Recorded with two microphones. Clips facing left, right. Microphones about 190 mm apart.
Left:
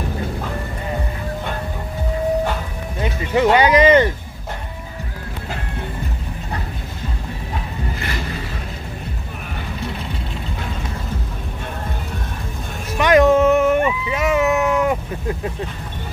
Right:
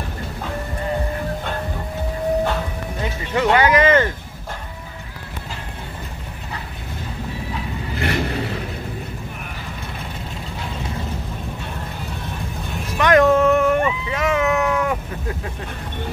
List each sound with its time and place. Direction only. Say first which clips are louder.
3.0 s music: left 4 dB; 20° left (ahead or behind)
8.0 s vehicle: right 5 dB; 60° right (ahead or behind)
13.0 s a sound: left 1 dB; 15° left (ahead or behind)